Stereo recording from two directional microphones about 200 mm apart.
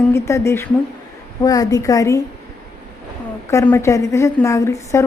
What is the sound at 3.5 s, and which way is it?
A woman's voice, 15° left (ahead or behind).